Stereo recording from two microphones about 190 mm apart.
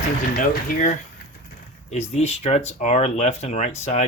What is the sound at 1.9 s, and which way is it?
Speech, 35° left (ahead or behind).